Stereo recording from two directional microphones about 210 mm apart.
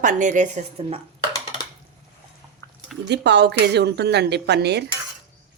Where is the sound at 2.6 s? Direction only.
15° left (ahead or behind).